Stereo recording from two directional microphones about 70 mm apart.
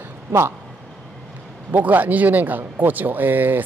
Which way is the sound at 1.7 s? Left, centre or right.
Right.